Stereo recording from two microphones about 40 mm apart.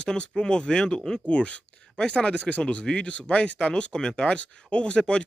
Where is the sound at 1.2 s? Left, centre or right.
Left.